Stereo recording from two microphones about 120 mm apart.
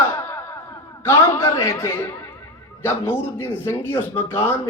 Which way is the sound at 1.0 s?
20° left (ahead or behind).